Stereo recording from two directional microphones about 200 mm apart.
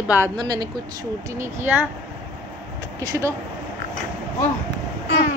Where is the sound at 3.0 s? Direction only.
15° right (ahead or behind).